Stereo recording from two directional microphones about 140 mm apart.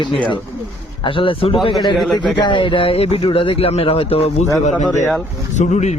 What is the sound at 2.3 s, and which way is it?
Speech, 35° left (ahead or behind).